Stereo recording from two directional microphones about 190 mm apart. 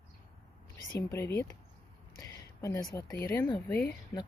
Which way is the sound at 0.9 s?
15° left (ahead or behind).